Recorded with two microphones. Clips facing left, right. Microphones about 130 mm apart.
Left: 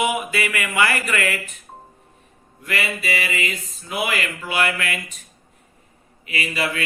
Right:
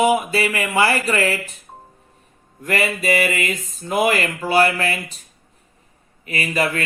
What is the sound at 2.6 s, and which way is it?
Mantra, 40° right (ahead or behind).